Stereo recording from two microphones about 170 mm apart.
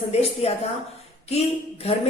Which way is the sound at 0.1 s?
35° left (ahead or behind).